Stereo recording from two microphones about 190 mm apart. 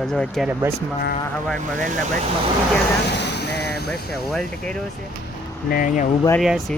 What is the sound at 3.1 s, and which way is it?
Vehicle, 65° left (ahead or behind).